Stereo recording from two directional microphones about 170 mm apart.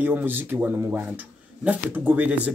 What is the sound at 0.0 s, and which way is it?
Speech, 10° right (ahead or behind).